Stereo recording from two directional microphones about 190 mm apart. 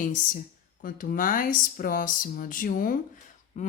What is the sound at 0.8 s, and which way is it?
Speech, 45° left (ahead or behind).